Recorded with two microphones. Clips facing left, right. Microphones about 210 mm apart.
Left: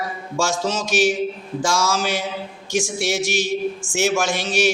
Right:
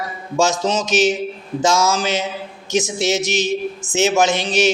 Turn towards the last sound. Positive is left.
turn(degrees=-20)  # may be behind; listen again after turning